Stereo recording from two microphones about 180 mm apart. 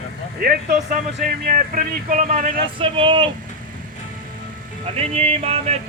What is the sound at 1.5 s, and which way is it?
Speech, 45° right (ahead or behind).